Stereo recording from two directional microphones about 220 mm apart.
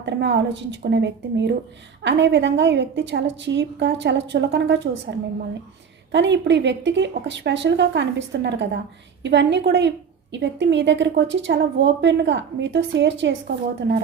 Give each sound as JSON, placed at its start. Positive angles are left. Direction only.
{"t": 0.0, "sound": "a woman's voice", "side_deg": -50}
{"t": 6.1, "sound": "a woman's voice", "side_deg": -55}